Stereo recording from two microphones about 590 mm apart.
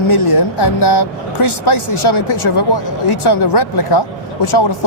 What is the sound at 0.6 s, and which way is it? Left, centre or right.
Speech, left.